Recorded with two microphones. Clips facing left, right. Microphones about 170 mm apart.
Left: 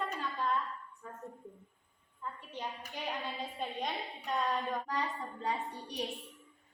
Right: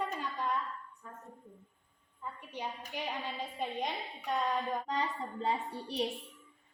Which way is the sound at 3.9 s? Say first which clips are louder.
Right 1 dB; centre (ahead or behind).